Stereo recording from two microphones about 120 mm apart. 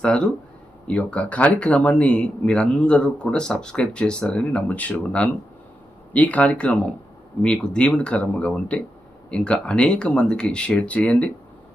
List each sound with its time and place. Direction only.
0.9 s speech: 10° left (ahead or behind)